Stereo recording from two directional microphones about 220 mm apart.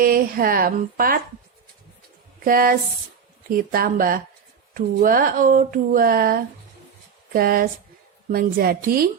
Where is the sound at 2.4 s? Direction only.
40° right (ahead or behind).